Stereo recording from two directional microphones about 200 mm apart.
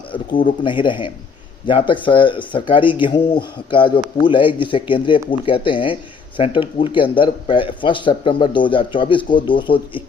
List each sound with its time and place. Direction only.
0.6 s speech: 25° left (ahead or behind)